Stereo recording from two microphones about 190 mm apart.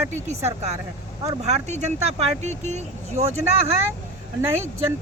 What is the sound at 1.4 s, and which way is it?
Speech, 35° right (ahead or behind).